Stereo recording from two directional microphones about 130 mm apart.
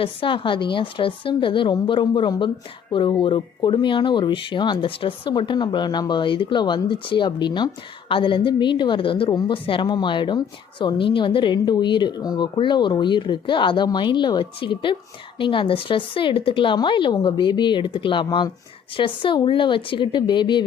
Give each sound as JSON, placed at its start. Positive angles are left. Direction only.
{"t": 0.0, "sound": "speech", "side_deg": 40}